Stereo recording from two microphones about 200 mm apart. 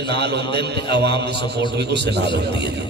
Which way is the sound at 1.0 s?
55° right (ahead or behind).